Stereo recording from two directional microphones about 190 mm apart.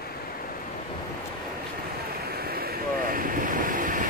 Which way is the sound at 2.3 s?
55° right (ahead or behind).